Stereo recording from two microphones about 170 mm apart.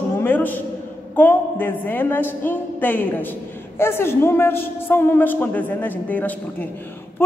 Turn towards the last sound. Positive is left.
turn(degrees=10)  # may be behind; listen again after turning